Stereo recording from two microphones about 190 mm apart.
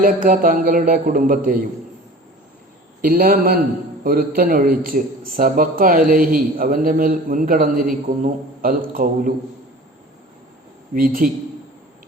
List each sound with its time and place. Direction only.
0.0 s a man's voice: 45° right (ahead or behind)
3.0 s a man's voice: 45° right (ahead or behind)
10.9 s a man's voice: 45° right (ahead or behind)